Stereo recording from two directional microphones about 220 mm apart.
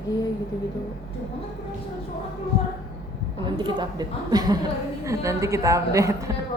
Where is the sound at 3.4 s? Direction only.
20° right (ahead or behind).